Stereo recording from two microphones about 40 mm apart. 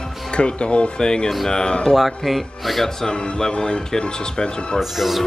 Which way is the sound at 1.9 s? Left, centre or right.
Centre.